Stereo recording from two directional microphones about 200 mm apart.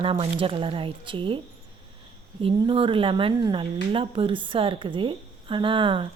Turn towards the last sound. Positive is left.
turn(degrees=-25)  # may be behind; listen again after turning